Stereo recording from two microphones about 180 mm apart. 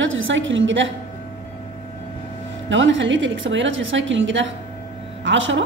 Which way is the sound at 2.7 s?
90° right.